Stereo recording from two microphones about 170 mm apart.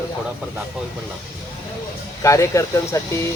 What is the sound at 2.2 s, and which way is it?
Speech, 20° left (ahead or behind).